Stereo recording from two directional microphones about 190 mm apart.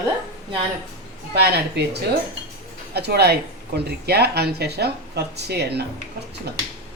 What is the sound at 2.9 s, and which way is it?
A woman's voice, 60° right (ahead or behind).